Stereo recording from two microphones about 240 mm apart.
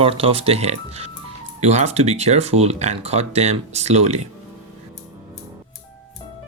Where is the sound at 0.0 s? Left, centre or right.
Right.